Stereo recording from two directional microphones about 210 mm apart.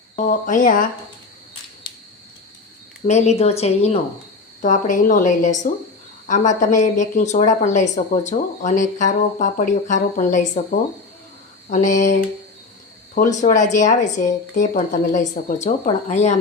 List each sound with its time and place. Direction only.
0.2 s a woman's voice: 40° left (ahead or behind)
3.1 s a woman's voice: 30° left (ahead or behind)
13.1 s a woman's voice: 35° left (ahead or behind)